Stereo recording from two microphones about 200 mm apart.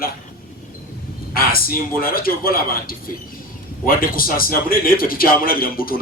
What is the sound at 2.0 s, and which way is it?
A man's voice, 45° left (ahead or behind).